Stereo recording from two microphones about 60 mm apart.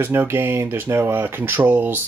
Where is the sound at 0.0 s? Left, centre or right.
Right.